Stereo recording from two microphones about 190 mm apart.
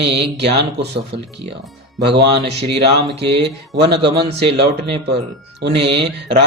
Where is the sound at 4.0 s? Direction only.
25° right (ahead or behind).